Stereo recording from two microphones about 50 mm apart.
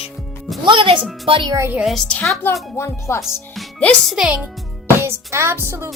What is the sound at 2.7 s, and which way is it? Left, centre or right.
Speech, left.